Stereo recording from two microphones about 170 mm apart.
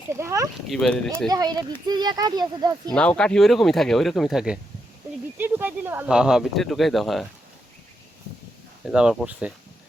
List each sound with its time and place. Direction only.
0.1 s speech: 15° right (ahead or behind)
0.7 s speech: centre (ahead or behind)
1.3 s speech: 25° right (ahead or behind)
2.9 s speech: 5° left (ahead or behind)
8.8 s speech: 5° right (ahead or behind)